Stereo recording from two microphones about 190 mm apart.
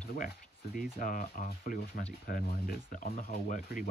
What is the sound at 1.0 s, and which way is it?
Speech, 45° left (ahead or behind).